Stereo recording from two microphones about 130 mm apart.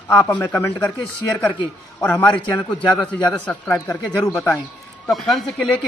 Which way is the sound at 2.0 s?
10° left (ahead or behind).